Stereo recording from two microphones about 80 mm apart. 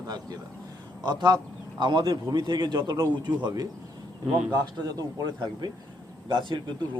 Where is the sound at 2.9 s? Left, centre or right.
Right.